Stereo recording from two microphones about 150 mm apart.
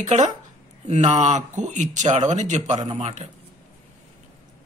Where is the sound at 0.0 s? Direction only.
50° right (ahead or behind).